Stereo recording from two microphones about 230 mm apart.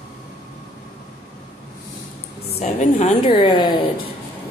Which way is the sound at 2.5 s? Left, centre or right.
Left.